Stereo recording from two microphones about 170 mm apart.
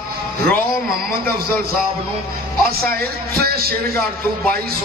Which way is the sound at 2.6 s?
65° right (ahead or behind).